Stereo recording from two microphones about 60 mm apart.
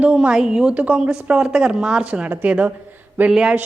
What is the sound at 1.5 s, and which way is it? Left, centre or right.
Speech, centre.